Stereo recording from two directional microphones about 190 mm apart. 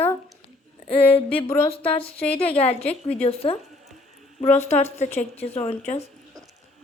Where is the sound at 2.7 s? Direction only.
35° left (ahead or behind).